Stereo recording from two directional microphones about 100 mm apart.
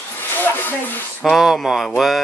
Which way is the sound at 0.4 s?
20° left (ahead or behind).